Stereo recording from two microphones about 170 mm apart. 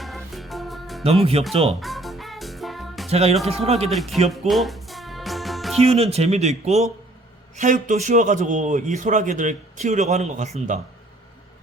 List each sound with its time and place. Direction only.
0.0 s music: centre (ahead or behind)
1.0 s speech: 35° right (ahead or behind)
1.8 s music: centre (ahead or behind)
3.1 s speech: 40° right (ahead or behind)
3.9 s speech: centre (ahead or behind)
4.3 s music: centre (ahead or behind)
5.8 s a man's voice: 35° right (ahead or behind)